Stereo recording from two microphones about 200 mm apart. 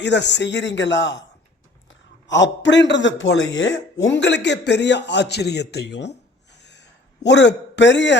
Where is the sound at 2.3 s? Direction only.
65° left (ahead or behind).